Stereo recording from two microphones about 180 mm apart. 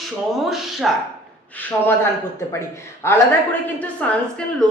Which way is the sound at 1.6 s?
10° left (ahead or behind).